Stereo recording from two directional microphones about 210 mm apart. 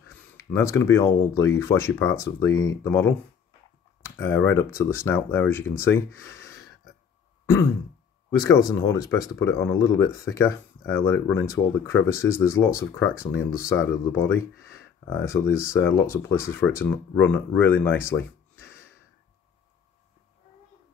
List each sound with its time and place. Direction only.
0.4 s speech: 15° left (ahead or behind)
4.2 s speech: 10° left (ahead or behind)
8.6 s speech: 15° left (ahead or behind)